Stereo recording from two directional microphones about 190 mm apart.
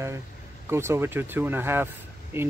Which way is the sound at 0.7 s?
15° right (ahead or behind).